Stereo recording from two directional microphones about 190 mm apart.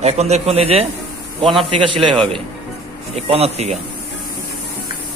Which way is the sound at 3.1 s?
35° right (ahead or behind).